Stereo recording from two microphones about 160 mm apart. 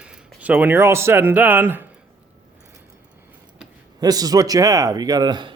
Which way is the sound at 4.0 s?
25° right (ahead or behind).